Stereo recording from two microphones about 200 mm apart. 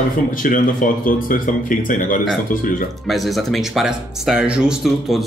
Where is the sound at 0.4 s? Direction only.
40° left (ahead or behind).